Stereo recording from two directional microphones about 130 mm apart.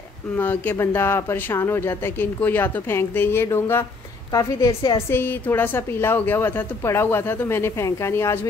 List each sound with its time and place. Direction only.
0.4 s a woman's voice: 15° left (ahead or behind)